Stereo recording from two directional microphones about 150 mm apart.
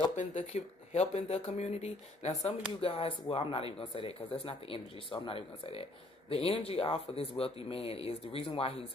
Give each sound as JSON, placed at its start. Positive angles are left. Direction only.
{"t": 0.1, "sound": "speech", "side_deg": 50}